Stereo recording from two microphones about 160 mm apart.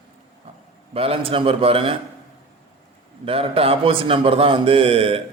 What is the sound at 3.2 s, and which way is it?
A man's voice, 35° right (ahead or behind).